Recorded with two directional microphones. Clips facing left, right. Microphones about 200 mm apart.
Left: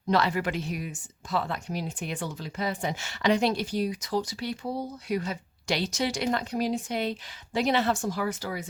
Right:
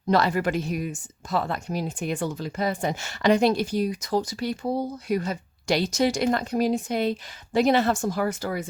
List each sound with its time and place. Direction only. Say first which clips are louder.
0.1 s speech: right 4 dB; 45° right (ahead or behind)